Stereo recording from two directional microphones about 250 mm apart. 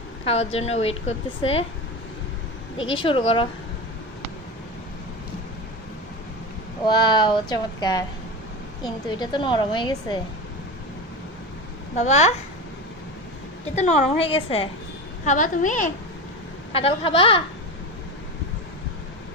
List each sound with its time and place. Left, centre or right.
0.3 s a woman's voice: left
2.9 s a woman's voice: centre
6.8 s a woman's voice: centre
11.9 s a woman's voice: left
13.7 s a woman's voice: left